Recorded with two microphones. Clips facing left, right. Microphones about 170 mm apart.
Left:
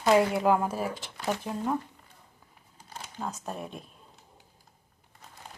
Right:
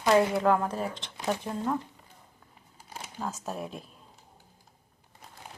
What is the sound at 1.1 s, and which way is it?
Speech, 15° right (ahead or behind).